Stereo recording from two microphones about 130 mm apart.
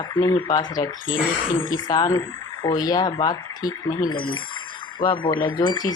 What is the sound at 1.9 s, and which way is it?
Speech, 30° left (ahead or behind).